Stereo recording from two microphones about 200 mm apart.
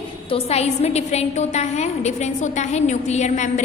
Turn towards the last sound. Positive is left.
turn(degrees=35)  # may be behind; listen again after turning